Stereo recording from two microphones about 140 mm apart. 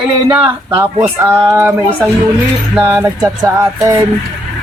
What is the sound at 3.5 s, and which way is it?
Speech, 20° right (ahead or behind).